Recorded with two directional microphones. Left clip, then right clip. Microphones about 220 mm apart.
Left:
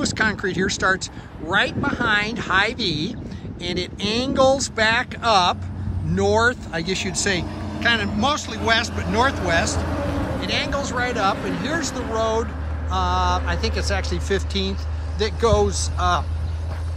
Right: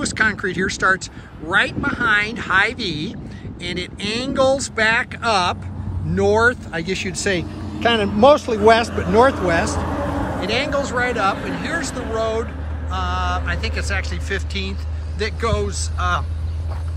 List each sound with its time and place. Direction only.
0.0 s speech: 5° left (ahead or behind)
9.8 s vehicle: 20° right (ahead or behind)
10.4 s speech: centre (ahead or behind); by 16.2 s 15° left (ahead or behind)